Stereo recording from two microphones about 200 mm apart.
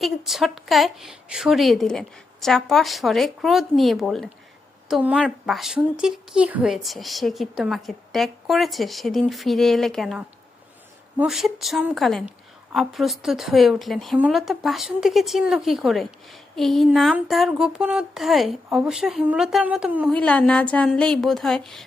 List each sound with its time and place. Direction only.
0.0 s speech: centre (ahead or behind)
20.1 s speech: 5° left (ahead or behind)